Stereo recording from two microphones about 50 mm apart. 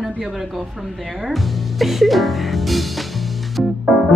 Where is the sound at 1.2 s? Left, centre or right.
Centre.